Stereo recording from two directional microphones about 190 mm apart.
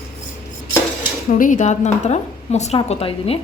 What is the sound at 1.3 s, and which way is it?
Speech, 45° left (ahead or behind).